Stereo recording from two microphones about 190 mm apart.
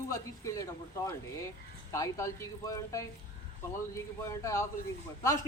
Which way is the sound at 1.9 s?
15° left (ahead or behind).